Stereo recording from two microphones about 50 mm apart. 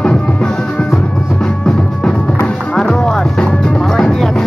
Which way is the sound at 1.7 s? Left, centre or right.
Centre.